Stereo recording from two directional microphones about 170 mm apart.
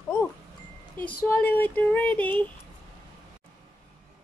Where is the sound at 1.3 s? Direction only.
10° left (ahead or behind).